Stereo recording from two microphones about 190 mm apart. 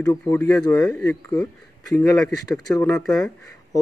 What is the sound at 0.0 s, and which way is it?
Speech, 15° left (ahead or behind).